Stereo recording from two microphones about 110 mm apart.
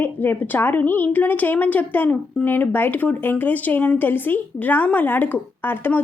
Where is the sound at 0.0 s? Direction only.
20° left (ahead or behind).